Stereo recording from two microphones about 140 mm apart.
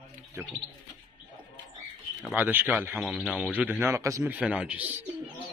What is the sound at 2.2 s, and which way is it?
A man's voice, 10° right (ahead or behind).